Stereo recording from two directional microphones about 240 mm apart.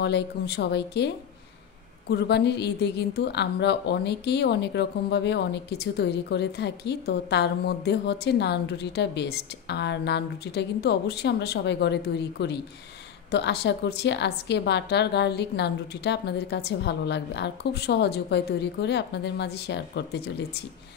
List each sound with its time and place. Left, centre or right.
0.0 s a woman's voice: left